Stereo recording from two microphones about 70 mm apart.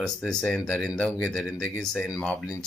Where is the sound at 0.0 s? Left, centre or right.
Centre.